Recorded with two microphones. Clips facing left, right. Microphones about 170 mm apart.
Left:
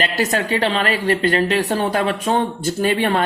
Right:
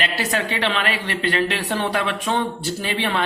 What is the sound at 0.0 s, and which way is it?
A woman's voice, 40° left (ahead or behind).